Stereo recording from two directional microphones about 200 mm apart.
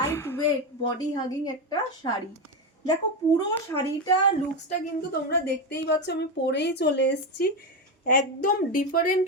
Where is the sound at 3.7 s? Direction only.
15° left (ahead or behind).